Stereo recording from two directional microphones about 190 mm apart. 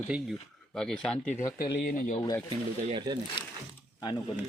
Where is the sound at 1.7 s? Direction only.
50° left (ahead or behind).